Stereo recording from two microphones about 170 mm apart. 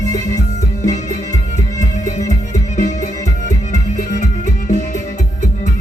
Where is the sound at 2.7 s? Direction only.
45° left (ahead or behind).